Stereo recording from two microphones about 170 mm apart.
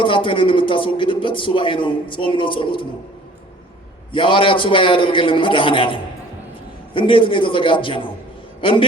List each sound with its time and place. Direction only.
0.0 s a man's voice: 30° left (ahead or behind)
4.1 s a man's voice: 30° left (ahead or behind)